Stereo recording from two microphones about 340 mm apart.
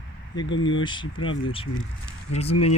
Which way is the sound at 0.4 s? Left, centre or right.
Left.